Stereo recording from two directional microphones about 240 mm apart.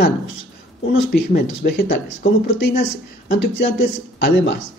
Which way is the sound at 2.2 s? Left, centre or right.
Left.